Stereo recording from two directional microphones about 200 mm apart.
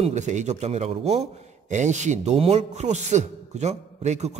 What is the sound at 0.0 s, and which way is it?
Speech, 35° right (ahead or behind).